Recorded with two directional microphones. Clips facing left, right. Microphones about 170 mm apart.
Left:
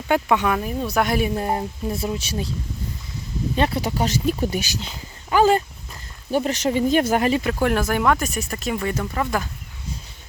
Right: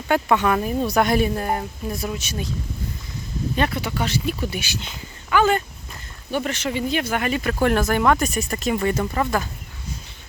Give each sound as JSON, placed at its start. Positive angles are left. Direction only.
{"t": 0.1, "sound": "speech", "side_deg": 10}
{"t": 1.4, "sound": "speech", "side_deg": 25}
{"t": 3.5, "sound": "speech", "side_deg": 30}
{"t": 7.4, "sound": "speech", "side_deg": 10}